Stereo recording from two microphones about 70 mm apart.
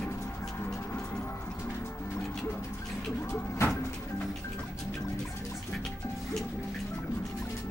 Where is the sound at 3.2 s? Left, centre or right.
Left.